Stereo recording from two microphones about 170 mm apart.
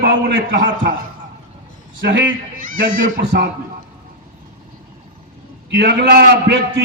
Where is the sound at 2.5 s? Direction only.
55° right (ahead or behind).